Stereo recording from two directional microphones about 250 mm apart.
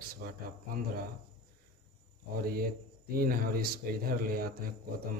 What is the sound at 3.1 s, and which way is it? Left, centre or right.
A man's voice, right.